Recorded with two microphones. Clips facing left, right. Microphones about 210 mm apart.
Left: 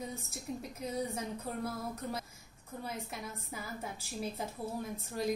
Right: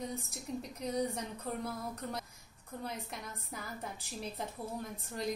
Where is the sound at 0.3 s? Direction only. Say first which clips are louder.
Even; 5° left (ahead or behind).